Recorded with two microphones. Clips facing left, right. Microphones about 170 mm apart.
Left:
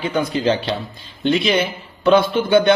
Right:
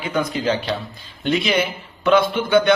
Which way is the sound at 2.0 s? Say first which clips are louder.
Left 2 dB; 30° left (ahead or behind).